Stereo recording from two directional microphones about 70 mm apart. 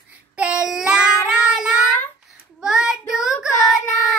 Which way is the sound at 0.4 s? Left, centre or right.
Centre.